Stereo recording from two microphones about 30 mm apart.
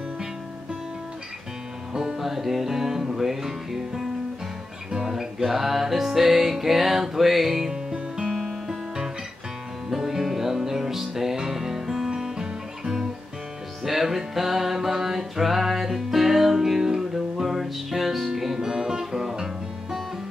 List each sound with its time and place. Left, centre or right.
2.1 s music: centre
5.1 s music: centre
9.8 s music: centre
18.6 s music: right